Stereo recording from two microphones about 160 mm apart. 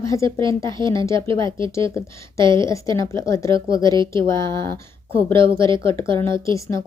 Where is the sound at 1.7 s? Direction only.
20° left (ahead or behind).